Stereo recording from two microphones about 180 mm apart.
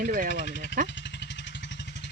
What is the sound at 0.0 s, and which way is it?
Speech, 50° right (ahead or behind).